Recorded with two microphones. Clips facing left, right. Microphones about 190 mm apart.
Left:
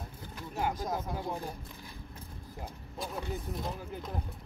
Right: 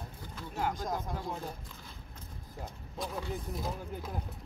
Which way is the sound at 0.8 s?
5° left (ahead or behind).